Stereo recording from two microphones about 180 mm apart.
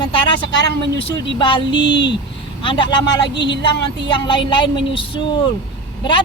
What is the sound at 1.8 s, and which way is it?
Speech, 80° left.